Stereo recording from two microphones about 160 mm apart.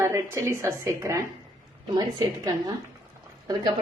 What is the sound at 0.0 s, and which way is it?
A woman's voice, 15° right (ahead or behind).